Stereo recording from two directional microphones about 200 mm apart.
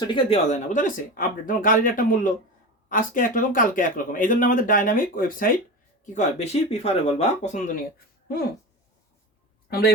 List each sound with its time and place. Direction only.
0.1 s speech: 25° left (ahead or behind); by 5.5 s 45° left (ahead or behind)
6.1 s speech: 35° left (ahead or behind)
9.6 s speech: 50° left (ahead or behind)